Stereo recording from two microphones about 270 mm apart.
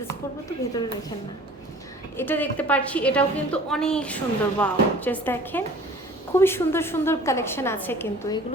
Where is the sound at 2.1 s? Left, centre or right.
Centre.